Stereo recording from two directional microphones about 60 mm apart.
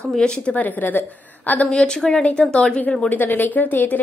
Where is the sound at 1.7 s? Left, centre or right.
Centre.